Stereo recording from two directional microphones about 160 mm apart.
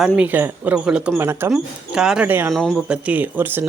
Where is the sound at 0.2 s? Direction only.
10° right (ahead or behind).